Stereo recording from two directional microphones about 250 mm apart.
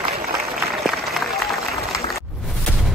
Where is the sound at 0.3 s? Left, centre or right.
Centre.